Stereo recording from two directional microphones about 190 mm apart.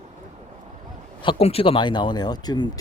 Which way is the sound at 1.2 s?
30° left (ahead or behind).